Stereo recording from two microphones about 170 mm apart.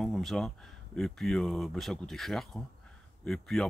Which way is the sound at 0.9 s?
Centre (ahead or behind).